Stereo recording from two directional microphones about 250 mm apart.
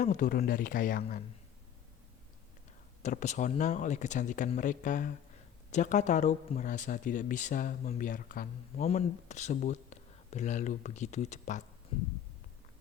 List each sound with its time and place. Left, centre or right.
0.0 s speech: left
3.0 s speech: left